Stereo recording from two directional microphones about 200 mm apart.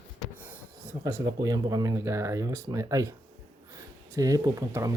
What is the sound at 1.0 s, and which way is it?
Speech, 20° right (ahead or behind).